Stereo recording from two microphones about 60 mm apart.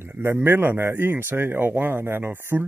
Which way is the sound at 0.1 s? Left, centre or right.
Right.